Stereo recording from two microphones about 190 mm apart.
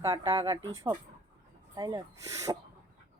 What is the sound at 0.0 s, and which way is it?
A woman's voice, 20° right (ahead or behind).